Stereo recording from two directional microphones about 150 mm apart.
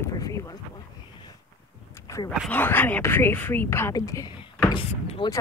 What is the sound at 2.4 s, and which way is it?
Speech, 10° left (ahead or behind).